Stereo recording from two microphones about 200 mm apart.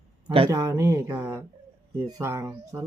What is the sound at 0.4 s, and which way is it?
Speech, 15° right (ahead or behind).